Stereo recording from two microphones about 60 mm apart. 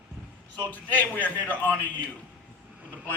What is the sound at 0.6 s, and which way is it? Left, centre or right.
A man's voice, left.